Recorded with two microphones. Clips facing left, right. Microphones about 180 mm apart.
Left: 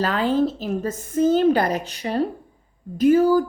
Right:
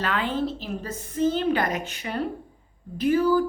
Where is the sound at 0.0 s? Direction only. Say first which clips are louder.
Left 6 dB; 40° left (ahead or behind).